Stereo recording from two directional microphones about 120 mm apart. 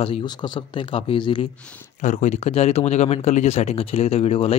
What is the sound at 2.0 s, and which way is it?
Speech, 85° left.